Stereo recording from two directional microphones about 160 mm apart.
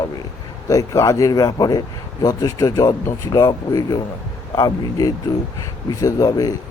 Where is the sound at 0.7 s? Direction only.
20° left (ahead or behind).